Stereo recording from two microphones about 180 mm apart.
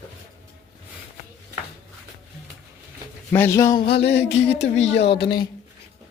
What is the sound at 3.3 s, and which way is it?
Speech, 15° left (ahead or behind).